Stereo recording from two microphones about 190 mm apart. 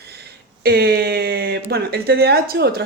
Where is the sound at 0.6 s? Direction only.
55° right (ahead or behind).